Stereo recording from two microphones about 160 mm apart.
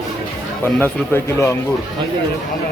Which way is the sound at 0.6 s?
15° left (ahead or behind).